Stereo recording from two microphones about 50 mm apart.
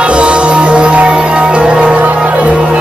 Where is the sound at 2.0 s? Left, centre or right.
Right.